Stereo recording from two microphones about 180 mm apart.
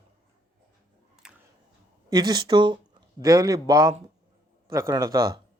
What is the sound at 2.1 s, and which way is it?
Speech, 25° right (ahead or behind).